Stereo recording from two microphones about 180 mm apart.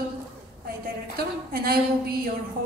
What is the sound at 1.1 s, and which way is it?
A woman's voice, 55° right (ahead or behind).